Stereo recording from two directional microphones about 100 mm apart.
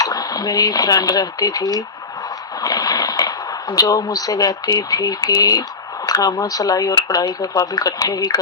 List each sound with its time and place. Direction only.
0.0 s speech: 40° left (ahead or behind)